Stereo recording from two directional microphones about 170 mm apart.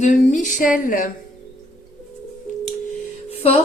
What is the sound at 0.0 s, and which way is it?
Speech, 45° left (ahead or behind).